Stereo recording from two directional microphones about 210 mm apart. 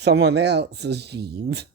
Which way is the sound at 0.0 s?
55° right (ahead or behind).